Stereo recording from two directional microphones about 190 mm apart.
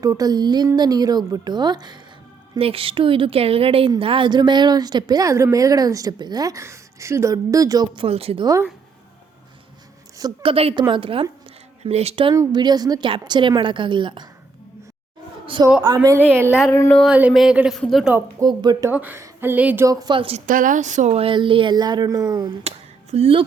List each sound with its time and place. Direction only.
0.0 s a woman's voice: 20° right (ahead or behind)
10.2 s a woman's voice: 25° right (ahead or behind)
12.3 s a woman's voice: 20° right (ahead or behind)
15.4 s a woman's voice: 25° right (ahead or behind); by 16.6 s 10° right (ahead or behind)
16.6 s speech: 15° left (ahead or behind)
16.9 s a woman's voice: 5° right (ahead or behind)
18.3 s a woman's voice: 20° right (ahead or behind)
18.9 s a woman's voice: 10° right (ahead or behind); by 20.4 s 30° right (ahead or behind)
20.5 s a woman's voice: 45° right (ahead or behind); by 23.5 s 30° right (ahead or behind)